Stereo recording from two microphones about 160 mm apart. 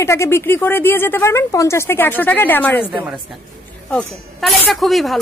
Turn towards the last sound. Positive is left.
turn(degrees=0)  # may be behind; listen again after turning